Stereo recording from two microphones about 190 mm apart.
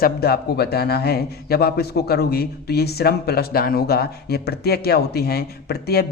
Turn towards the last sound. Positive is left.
turn(degrees=55)  # may be behind; listen again after turning